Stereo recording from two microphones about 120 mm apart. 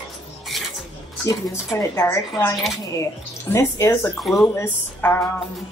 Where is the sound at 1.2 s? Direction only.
30° left (ahead or behind).